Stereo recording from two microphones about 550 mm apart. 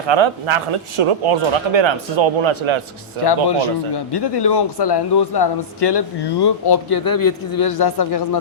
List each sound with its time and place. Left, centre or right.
0.1 s speech: right
3.2 s speech: left